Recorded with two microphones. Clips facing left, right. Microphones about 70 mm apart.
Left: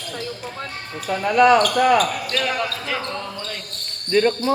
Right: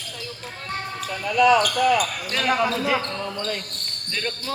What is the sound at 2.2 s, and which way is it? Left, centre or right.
Speech, centre.